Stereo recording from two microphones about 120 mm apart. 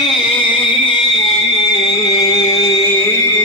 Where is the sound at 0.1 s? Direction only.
45° left (ahead or behind).